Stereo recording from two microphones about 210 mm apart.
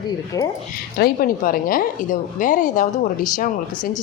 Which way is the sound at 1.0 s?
45° left (ahead or behind).